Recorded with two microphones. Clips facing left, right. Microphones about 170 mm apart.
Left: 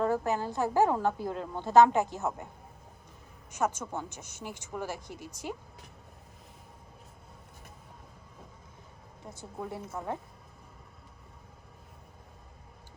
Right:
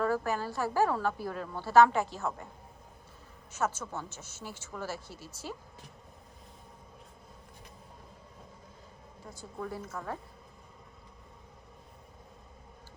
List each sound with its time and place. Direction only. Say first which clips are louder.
0.0 s a woman's voice: left 2 dB; 20° left (ahead or behind)
3.5 s speech: left 2 dB; 15° left (ahead or behind)
9.2 s a woman's voice: even; 20° left (ahead or behind)